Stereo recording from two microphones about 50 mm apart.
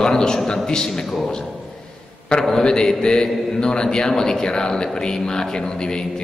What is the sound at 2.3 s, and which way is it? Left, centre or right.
A man's voice, centre.